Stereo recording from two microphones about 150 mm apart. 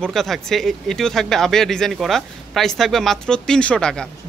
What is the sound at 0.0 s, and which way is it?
Speech, centre (ahead or behind).